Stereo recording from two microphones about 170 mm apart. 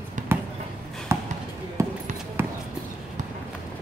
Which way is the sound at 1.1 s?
15° right (ahead or behind).